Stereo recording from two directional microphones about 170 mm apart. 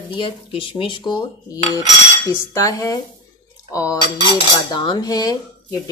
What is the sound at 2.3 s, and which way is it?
A woman's voice, 20° left (ahead or behind).